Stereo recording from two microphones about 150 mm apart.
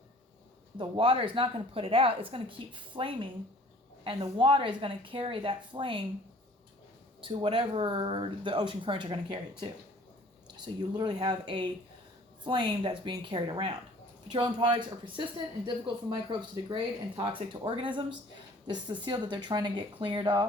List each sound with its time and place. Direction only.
0.8 s speech: 35° right (ahead or behind)
7.2 s speech: 35° right (ahead or behind)
10.8 s speech: 30° right (ahead or behind)